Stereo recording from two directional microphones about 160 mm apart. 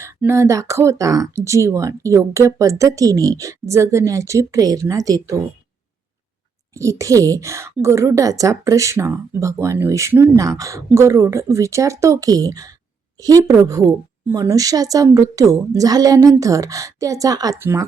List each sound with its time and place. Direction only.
0.0 s a woman's voice: 15° right (ahead or behind)
6.7 s a woman's voice: 20° right (ahead or behind)